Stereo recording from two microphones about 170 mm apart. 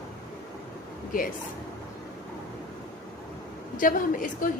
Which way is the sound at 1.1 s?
55° left (ahead or behind).